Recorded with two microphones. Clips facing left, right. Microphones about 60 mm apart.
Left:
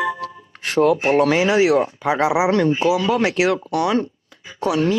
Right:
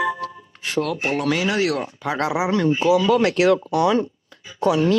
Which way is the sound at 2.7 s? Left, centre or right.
Centre.